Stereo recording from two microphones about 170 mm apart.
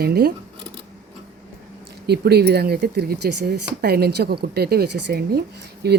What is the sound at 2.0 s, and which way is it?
Speech, 70° right (ahead or behind).